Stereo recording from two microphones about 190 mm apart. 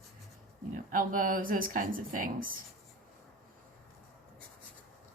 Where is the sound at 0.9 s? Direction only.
45° right (ahead or behind).